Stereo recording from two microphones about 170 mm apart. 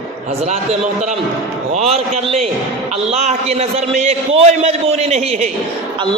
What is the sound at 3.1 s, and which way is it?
A man's voice, 40° right (ahead or behind).